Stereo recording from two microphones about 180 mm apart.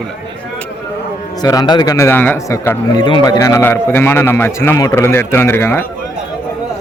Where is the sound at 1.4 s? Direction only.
20° left (ahead or behind).